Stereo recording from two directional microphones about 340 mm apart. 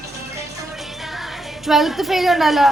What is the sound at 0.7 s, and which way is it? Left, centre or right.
Music, centre.